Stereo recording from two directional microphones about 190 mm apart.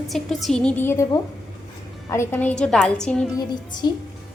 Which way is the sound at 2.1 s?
15° left (ahead or behind).